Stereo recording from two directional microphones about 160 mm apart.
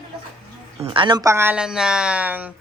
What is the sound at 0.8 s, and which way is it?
Speech, 30° right (ahead or behind).